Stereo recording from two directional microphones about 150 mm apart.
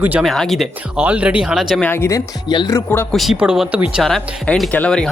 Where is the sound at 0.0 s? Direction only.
10° right (ahead or behind).